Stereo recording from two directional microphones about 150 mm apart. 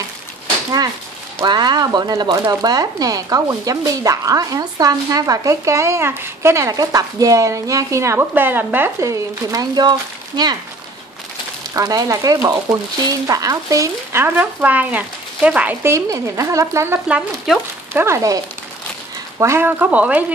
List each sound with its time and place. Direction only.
1.4 s speech: 25° right (ahead or behind)
11.7 s speech: 25° right (ahead or behind)